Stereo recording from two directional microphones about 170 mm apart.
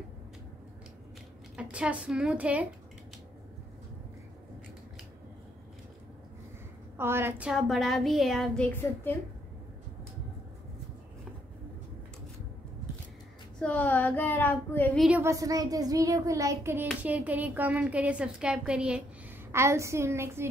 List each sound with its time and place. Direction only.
1.6 s a woman's voice: 5° right (ahead or behind)
7.0 s speech: 15° right (ahead or behind); by 9.2 s 10° left (ahead or behind)
13.6 s speech: 10° left (ahead or behind)
15.0 s a woman's voice: 5° right (ahead or behind)
15.2 s a child's voice: 20° right (ahead or behind)